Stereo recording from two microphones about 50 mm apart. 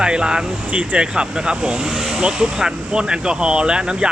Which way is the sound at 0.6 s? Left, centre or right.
Right.